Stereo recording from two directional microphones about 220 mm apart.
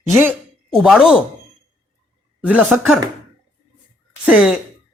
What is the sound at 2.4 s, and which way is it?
Speech, 5° right (ahead or behind).